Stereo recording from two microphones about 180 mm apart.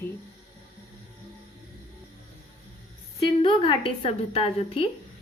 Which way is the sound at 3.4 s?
30° left (ahead or behind).